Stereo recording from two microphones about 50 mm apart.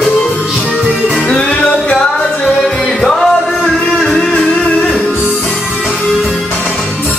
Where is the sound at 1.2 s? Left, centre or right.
Centre.